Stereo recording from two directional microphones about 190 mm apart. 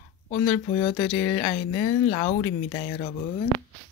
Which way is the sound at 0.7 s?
30° left (ahead or behind).